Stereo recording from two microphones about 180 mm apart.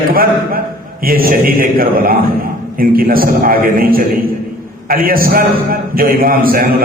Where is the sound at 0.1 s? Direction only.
55° right (ahead or behind).